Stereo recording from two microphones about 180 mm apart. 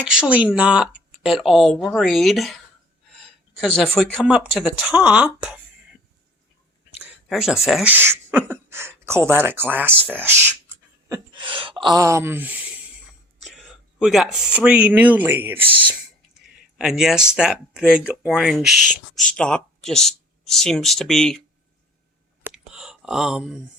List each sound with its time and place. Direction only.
0.0 s speech: 5° right (ahead or behind)
3.6 s speech: 5° left (ahead or behind)
7.3 s speech: centre (ahead or behind)
11.3 s speech: 30° right (ahead or behind); by 15.7 s 10° right (ahead or behind)
16.7 s speech: 5° right (ahead or behind)
22.4 s a sound: 5° right (ahead or behind)